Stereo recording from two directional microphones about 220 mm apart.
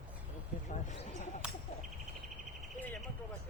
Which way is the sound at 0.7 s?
35° left (ahead or behind).